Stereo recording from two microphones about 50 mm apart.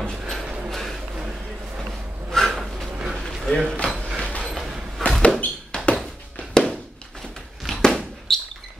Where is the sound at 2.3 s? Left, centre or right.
Centre.